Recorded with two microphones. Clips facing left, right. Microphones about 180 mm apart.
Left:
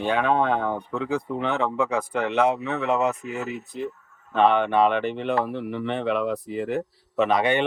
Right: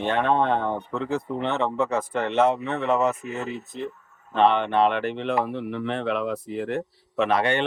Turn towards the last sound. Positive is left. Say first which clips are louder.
# left 1 dB
turn(degrees=0)  # may be behind; listen again after turning